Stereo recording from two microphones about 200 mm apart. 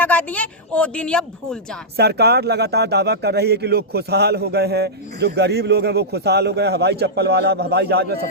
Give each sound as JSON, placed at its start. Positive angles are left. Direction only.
{"t": 0.0, "sound": "speech", "side_deg": 10}
{"t": 2.0, "sound": "speech", "side_deg": -55}